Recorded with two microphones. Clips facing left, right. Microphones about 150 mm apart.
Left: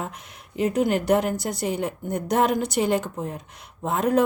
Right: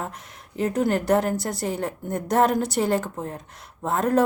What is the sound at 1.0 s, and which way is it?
Speech, centre (ahead or behind).